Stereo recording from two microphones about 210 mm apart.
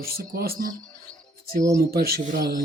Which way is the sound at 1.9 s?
50° right (ahead or behind).